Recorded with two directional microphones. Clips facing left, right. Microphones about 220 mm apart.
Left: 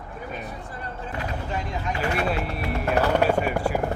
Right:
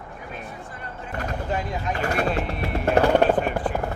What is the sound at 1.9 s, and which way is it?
Speech, 45° right (ahead or behind).